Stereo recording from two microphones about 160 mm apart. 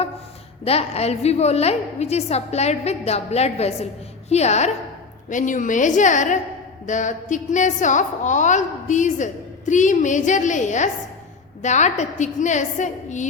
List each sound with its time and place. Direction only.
0.6 s a woman's voice: 40° left (ahead or behind)